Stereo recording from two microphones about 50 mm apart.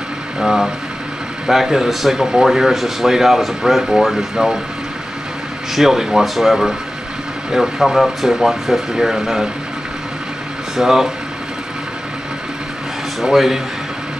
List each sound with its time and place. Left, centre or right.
0.4 s speech: centre
5.8 s speech: centre
10.8 s speech: centre
13.2 s speech: centre